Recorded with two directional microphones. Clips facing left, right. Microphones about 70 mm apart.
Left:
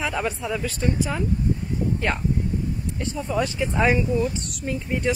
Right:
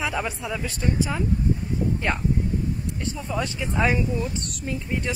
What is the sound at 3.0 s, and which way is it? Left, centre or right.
Speech, centre.